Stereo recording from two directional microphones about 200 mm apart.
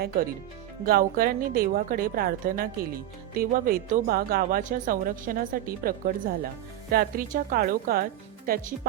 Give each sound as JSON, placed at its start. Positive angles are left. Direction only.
{"t": 0.9, "sound": "a woman's voice", "side_deg": -45}